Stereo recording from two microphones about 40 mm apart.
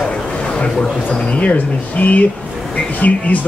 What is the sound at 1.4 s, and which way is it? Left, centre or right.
Speech, left.